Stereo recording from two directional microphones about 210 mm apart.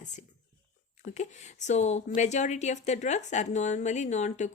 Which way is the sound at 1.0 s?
35° left (ahead or behind).